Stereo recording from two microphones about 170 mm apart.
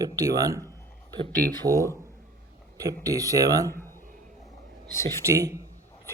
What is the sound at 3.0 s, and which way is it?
Speech, 20° right (ahead or behind).